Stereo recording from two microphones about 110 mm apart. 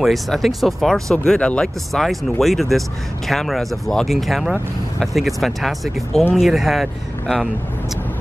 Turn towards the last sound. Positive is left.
turn(degrees=0)  # may be behind; listen again after turning